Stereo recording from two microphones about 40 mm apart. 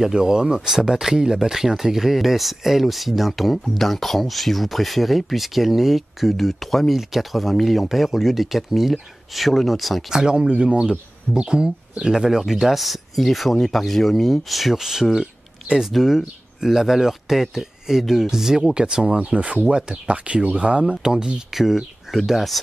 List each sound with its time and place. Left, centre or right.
0.0 s speech: centre
10.1 s speech: right
19.1 s speech: right
21.5 s speech: centre